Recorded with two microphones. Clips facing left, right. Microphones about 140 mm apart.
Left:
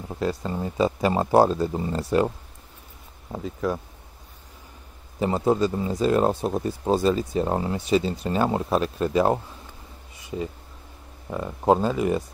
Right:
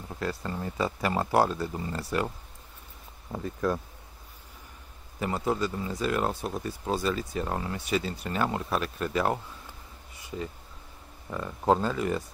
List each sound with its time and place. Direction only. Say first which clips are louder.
0.1 s speech: left 6 dB; 20° left (ahead or behind)
5.2 s speech: left 7 dB; 25° left (ahead or behind)
11.2 s speech: left 4 dB; 20° left (ahead or behind)